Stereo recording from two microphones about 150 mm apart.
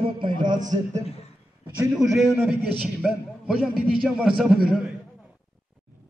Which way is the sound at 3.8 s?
5° right (ahead or behind).